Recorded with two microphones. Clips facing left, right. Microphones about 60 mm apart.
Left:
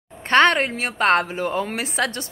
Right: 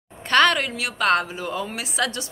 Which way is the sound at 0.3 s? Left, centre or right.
Left.